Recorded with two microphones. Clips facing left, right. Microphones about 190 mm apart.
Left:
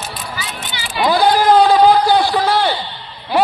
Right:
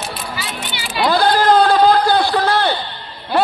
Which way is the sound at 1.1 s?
15° left (ahead or behind).